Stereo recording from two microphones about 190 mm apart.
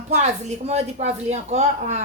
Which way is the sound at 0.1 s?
35° right (ahead or behind).